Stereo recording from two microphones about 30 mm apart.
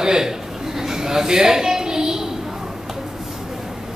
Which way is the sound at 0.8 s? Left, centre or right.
Centre.